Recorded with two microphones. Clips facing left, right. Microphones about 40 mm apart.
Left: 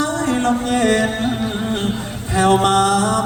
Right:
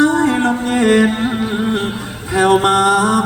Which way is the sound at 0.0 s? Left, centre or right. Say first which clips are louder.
Right 5 dB; centre.